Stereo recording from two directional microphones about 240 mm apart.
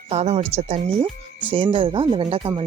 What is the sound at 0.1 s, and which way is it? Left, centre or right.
Speech, right.